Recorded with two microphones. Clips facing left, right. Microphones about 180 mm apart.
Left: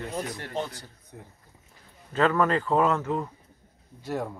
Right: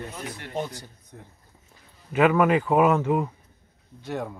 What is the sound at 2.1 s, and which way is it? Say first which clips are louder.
A man's voice: right 4 dB; 15° right (ahead or behind).